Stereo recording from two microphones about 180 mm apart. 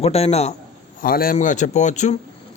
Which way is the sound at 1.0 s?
55° left (ahead or behind).